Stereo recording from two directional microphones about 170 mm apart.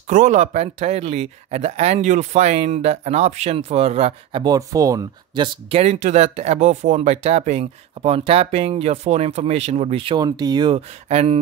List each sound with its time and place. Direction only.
0.1 s speech: 45° right (ahead or behind); by 10.8 s 25° right (ahead or behind)
11.1 s speech: 40° right (ahead or behind)